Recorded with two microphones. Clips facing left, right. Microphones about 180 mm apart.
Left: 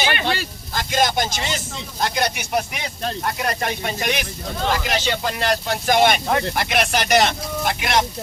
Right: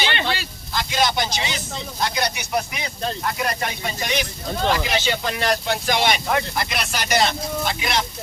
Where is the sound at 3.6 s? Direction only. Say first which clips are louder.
Left 3 dB; 55° left (ahead or behind).